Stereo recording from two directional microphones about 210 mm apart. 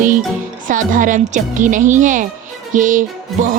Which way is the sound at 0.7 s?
40° right (ahead or behind).